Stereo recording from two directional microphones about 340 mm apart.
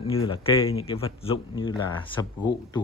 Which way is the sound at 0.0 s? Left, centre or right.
Centre.